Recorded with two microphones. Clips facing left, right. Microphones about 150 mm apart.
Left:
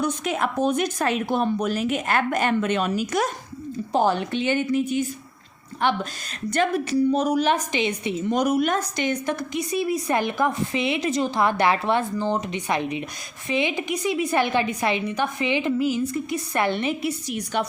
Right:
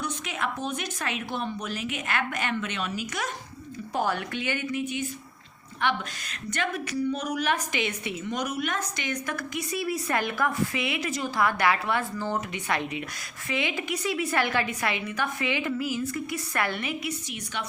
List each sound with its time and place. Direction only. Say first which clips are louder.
0.0 s speech: left 7 dB; 40° left (ahead or behind)
3.9 s a woman's voice: left 7 dB; 25° left (ahead or behind)
8.3 s a woman's voice: left 9 dB; 35° left (ahead or behind)